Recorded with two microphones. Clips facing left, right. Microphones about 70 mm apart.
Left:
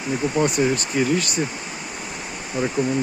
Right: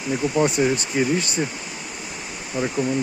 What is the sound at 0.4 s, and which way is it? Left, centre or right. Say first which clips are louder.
Speech: even; right.